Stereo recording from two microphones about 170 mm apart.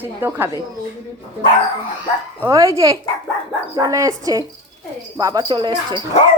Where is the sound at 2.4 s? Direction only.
20° right (ahead or behind).